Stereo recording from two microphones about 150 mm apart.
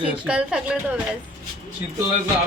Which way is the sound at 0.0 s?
5° right (ahead or behind).